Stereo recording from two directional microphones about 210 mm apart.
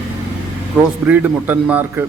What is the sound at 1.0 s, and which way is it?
A man's voice, 10° right (ahead or behind).